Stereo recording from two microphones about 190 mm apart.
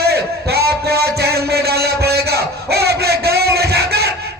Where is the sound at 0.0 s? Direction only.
55° right (ahead or behind).